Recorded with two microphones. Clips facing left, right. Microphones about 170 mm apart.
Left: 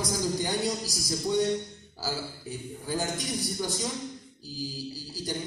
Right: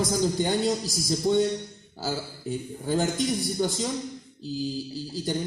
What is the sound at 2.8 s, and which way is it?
Speech, 25° right (ahead or behind).